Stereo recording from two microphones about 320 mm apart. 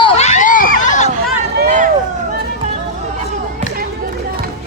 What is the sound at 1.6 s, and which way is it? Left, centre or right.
Run, right.